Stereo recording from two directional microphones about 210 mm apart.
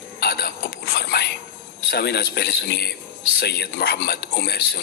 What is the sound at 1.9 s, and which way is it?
A man's voice, 50° left (ahead or behind).